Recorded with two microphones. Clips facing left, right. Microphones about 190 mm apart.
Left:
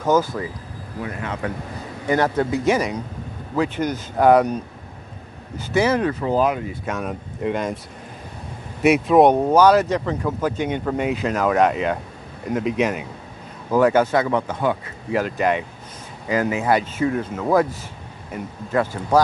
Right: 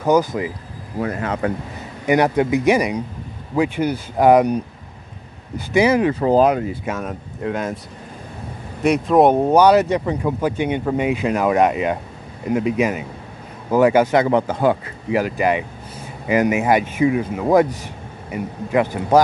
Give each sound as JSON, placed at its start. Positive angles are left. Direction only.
{"t": 0.0, "sound": "speech", "side_deg": -15}
{"t": 0.9, "sound": "speech", "side_deg": -45}
{"t": 2.0, "sound": "speech", "side_deg": -15}
{"t": 5.7, "sound": "speech", "side_deg": -10}
{"t": 6.2, "sound": "speech", "side_deg": -40}
{"t": 6.9, "sound": "speech", "side_deg": 0}
{"t": 8.8, "sound": "speech", "side_deg": 5}
{"t": 9.4, "sound": "speech", "side_deg": -15}
{"t": 14.1, "sound": "speech", "side_deg": -30}
{"t": 15.0, "sound": "speech", "side_deg": -5}